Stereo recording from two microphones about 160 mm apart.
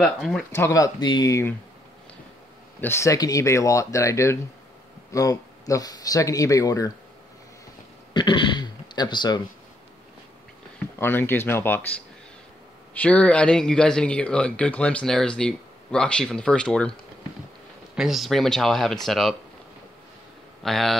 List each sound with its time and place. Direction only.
0.0 s speech: centre (ahead or behind)
0.5 s speech: 15° left (ahead or behind)
2.8 s speech: 15° left (ahead or behind)
8.1 s a sound: 30° left (ahead or behind)
11.0 s speech: 15° left (ahead or behind)
12.9 s speech: 10° left (ahead or behind)
17.9 s speech: centre (ahead or behind)
20.6 s speech: centre (ahead or behind)